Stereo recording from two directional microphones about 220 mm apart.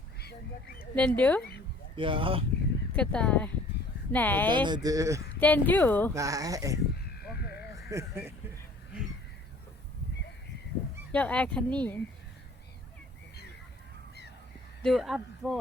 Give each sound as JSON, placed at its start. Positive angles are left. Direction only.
{"t": 0.2, "sound": "speech", "side_deg": 45}
{"t": 0.8, "sound": "speech", "side_deg": 5}
{"t": 2.0, "sound": "speech", "side_deg": -25}
{"t": 2.9, "sound": "speech", "side_deg": 5}
{"t": 4.5, "sound": "speech", "side_deg": -20}
{"t": 5.4, "sound": "speech", "side_deg": 5}
{"t": 6.1, "sound": "speech", "side_deg": -15}
{"t": 7.4, "sound": "crow", "side_deg": 45}
{"t": 7.8, "sound": "speech", "side_deg": -15}
{"t": 11.1, "sound": "speech", "side_deg": 5}
{"t": 14.8, "sound": "speech", "side_deg": 0}